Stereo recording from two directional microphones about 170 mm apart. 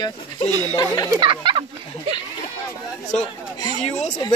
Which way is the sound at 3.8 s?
45° left (ahead or behind).